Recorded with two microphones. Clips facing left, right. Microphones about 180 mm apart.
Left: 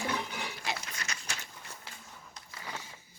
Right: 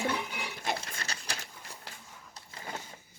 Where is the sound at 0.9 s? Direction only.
30° right (ahead or behind).